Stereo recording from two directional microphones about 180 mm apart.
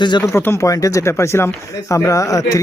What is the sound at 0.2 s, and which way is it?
Speech, 15° left (ahead or behind).